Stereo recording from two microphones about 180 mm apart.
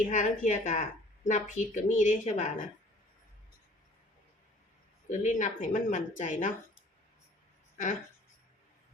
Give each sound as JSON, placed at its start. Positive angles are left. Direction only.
{"t": 0.0, "sound": "a woman's voice", "side_deg": 45}
{"t": 5.0, "sound": "a woman's voice", "side_deg": 45}